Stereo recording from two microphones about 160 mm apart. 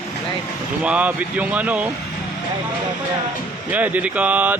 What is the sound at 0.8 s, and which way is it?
Speech, 10° right (ahead or behind).